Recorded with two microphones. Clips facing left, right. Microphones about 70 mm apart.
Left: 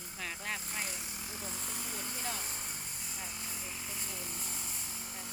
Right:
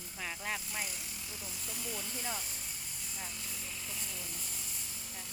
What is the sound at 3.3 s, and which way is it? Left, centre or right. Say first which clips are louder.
Speech: left 2 dB; left.